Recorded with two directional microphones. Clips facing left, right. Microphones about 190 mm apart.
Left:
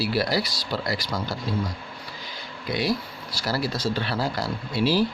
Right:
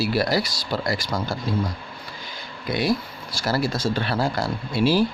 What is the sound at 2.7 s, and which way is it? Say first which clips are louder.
Speech: right 3 dB; 50° right (ahead or behind).